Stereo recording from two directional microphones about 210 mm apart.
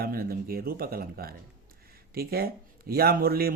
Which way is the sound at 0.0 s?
45° right (ahead or behind).